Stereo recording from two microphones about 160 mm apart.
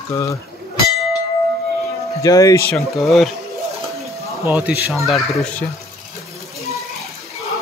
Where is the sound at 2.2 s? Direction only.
20° left (ahead or behind).